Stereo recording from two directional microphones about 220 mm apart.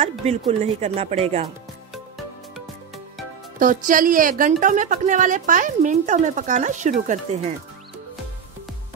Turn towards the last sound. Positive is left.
turn(degrees=-30)  # may be behind; listen again after turning